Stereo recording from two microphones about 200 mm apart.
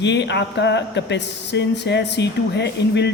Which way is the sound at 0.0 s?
60° left (ahead or behind).